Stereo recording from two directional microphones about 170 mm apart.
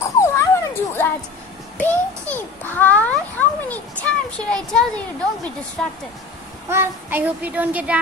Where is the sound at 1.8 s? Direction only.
10° left (ahead or behind).